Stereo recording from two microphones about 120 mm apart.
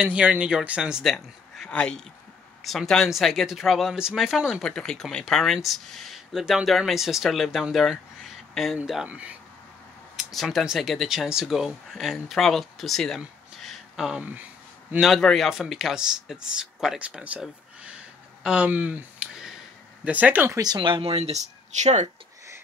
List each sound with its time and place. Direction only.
0.0 s a man's voice: 10° right (ahead or behind)
10.1 s speech: centre (ahead or behind)
13.6 s a sound: centre (ahead or behind)
15.0 s a man's voice: centre (ahead or behind); by 20.5 s 15° right (ahead or behind)
20.5 s speech: 35° right (ahead or behind); by 22.0 s 75° right (ahead or behind)